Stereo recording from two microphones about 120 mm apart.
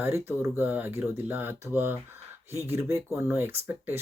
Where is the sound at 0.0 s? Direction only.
20° right (ahead or behind).